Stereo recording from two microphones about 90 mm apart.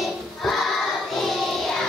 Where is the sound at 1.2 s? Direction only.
5° left (ahead or behind).